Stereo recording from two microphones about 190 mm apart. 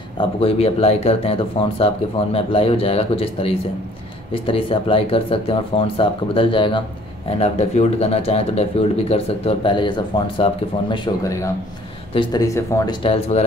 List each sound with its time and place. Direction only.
0.2 s speech: 30° left (ahead or behind)
13.0 s speech: 30° left (ahead or behind)